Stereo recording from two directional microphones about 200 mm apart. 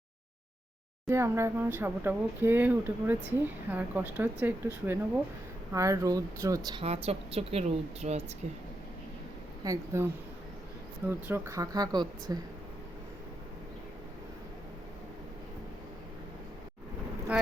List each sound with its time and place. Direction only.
1.0 s speech: 15° right (ahead or behind)
6.8 s a woman's voice: 30° right (ahead or behind)
9.6 s speech: 15° right (ahead or behind)
11.1 s speech: 10° right (ahead or behind)